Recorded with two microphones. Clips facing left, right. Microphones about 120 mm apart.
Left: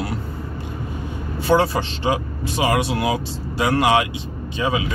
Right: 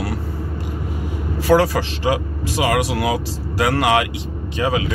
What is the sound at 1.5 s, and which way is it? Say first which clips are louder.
Speech: right 2 dB; 90° right.